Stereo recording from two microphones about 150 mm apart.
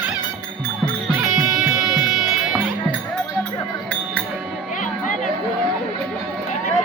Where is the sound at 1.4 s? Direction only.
Centre (ahead or behind).